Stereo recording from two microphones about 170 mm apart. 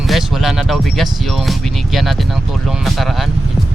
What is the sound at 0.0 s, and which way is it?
Speech, centre (ahead or behind).